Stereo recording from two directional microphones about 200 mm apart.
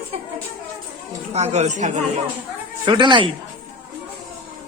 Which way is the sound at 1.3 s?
35° right (ahead or behind).